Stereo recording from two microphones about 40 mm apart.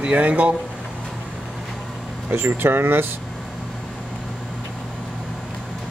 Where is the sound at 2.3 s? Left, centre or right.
Right.